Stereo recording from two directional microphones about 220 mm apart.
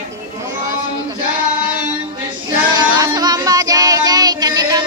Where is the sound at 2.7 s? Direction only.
20° right (ahead or behind).